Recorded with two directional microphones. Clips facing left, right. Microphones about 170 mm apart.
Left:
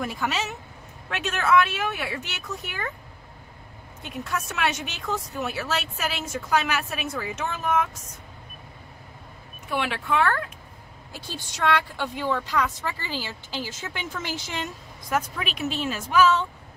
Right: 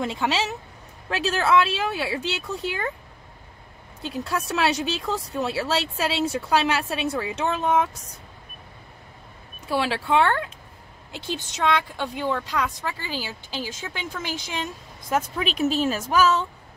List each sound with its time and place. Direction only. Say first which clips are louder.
0.0 s a woman's voice: right 3 dB; 25° right (ahead or behind)
4.0 s speech: right 3 dB; 30° right (ahead or behind)
9.7 s a woman's voice: right 3 dB; 30° right (ahead or behind); by 14.7 s 15° right (ahead or behind)
15.0 s speech: right 3 dB; 30° right (ahead or behind)